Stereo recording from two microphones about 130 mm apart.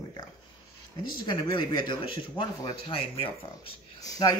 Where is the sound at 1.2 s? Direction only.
35° left (ahead or behind).